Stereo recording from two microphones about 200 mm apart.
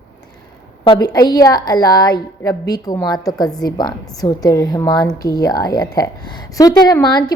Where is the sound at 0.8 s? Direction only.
20° left (ahead or behind).